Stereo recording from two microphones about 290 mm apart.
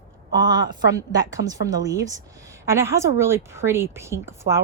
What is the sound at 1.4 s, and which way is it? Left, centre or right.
A woman's voice, centre.